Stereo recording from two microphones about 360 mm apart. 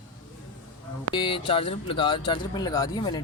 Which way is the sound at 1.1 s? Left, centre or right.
Centre.